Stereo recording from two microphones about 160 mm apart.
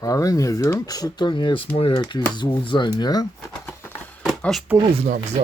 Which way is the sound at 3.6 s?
15° left (ahead or behind).